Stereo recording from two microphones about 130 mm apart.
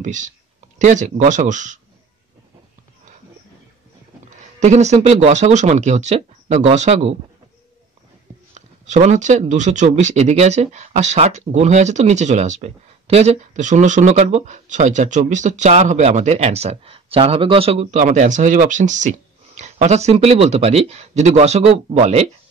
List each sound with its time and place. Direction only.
0.0 s speech: 70° right (ahead or behind)
4.6 s speech: 60° right (ahead or behind)
8.5 s speech: 65° right (ahead or behind)
17.9 s speech: 65° right (ahead or behind)